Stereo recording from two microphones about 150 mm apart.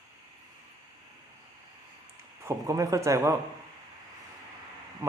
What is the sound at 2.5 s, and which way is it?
Speech, 20° right (ahead or behind).